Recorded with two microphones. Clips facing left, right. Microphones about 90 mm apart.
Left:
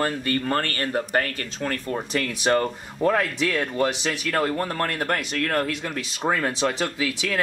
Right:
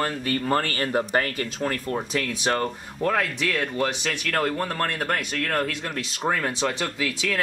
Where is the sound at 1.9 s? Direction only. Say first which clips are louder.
Even; 5° left (ahead or behind).